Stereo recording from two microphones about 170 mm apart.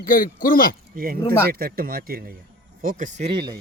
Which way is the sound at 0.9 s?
60° right (ahead or behind).